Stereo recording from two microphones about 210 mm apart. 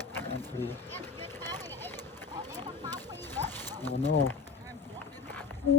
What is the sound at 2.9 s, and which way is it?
Horse, 10° left (ahead or behind).